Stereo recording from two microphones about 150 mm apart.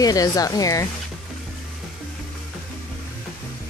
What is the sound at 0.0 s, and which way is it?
Speech, 25° left (ahead or behind).